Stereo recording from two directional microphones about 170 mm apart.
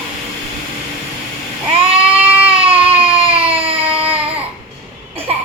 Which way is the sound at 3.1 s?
35° right (ahead or behind).